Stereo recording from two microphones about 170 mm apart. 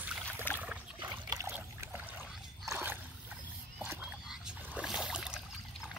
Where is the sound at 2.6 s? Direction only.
15° right (ahead or behind).